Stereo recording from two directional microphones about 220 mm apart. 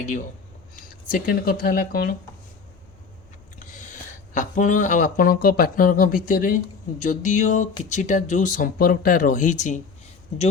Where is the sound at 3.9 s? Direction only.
35° left (ahead or behind).